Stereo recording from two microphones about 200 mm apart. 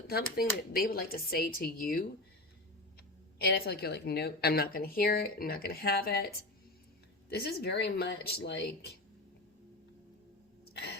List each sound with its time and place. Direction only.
0.3 s a woman's voice: 45° left (ahead or behind)
3.3 s a woman's voice: 50° left (ahead or behind)